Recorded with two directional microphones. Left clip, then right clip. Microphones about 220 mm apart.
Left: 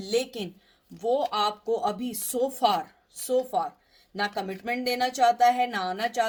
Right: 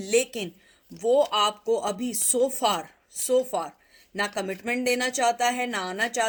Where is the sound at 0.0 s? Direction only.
35° right (ahead or behind).